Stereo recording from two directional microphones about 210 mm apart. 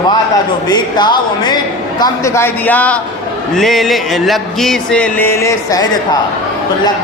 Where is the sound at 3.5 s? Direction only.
Centre (ahead or behind).